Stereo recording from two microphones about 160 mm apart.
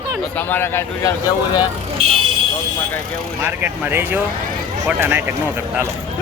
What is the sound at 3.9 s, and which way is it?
A woman's voice, 15° right (ahead or behind).